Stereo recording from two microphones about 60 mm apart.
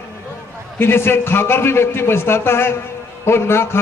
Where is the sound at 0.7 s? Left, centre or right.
Left.